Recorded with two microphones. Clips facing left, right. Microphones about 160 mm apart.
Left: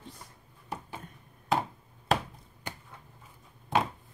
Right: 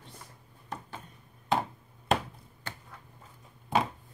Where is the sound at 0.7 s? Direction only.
10° left (ahead or behind).